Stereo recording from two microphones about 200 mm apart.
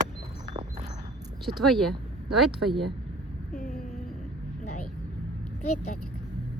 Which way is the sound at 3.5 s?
45° left (ahead or behind).